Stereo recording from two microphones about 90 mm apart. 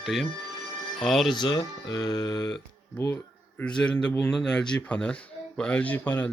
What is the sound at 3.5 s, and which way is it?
Speech, 10° left (ahead or behind).